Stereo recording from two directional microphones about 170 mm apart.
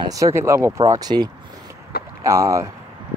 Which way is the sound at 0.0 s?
20° right (ahead or behind).